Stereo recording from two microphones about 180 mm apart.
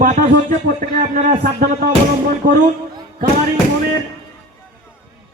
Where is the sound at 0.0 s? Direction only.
50° right (ahead or behind).